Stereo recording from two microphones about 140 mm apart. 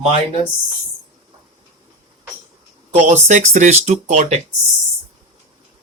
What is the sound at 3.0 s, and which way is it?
Speech, 55° right (ahead or behind).